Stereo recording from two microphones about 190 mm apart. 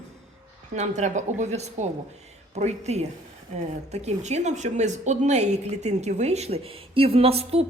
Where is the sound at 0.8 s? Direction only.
40° right (ahead or behind).